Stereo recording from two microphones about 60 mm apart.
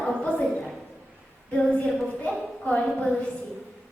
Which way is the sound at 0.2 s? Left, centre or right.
Left.